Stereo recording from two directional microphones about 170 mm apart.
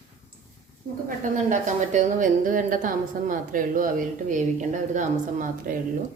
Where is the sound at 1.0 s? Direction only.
50° right (ahead or behind).